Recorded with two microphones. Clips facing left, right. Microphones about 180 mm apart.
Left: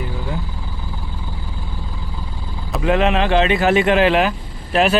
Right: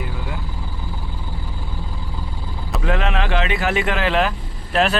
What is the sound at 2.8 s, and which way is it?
Speech, 20° left (ahead or behind).